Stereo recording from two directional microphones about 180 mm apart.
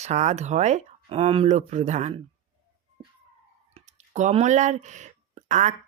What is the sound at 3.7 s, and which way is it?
Speech, 40° right (ahead or behind).